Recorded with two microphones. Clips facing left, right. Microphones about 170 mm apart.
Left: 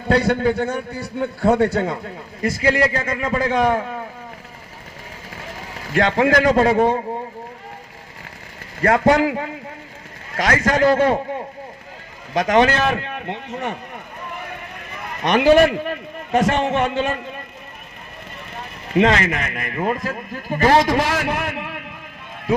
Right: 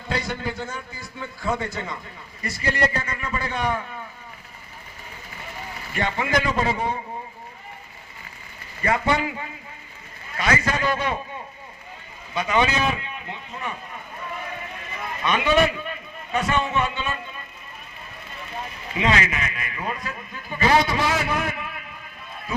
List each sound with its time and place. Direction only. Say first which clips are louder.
0.1 s a man's voice: left 11 dB; 65° left (ahead or behind)
2.4 s a man's voice: left 7 dB; 90° left
5.9 s a man's voice: left 8 dB; 90° left
8.8 s a man's voice: left 8 dB; 80° left
10.3 s a man's voice: left 5 dB; 90° left; by 14.0 s 75° left (ahead or behind)
15.2 s a man's voice: left 7 dB; 80° left
18.9 s a man's voice: left 6 dB; 60° left (ahead or behind)
22.5 s speech: left 10 dB; 90° left